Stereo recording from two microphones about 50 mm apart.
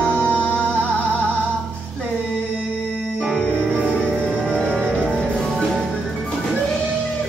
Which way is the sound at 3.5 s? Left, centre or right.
Right.